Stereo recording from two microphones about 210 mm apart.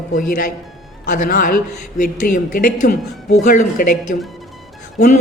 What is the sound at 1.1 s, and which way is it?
A man's voice, 40° left (ahead or behind).